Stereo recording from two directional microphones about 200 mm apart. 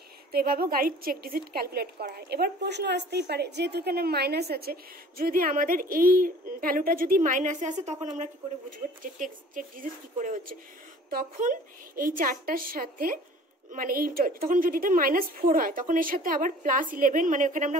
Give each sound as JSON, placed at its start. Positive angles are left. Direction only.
{"t": 0.3, "sound": "a woman's voice", "side_deg": -50}